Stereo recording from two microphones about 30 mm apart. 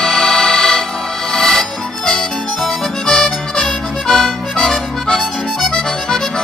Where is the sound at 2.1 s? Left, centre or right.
Centre.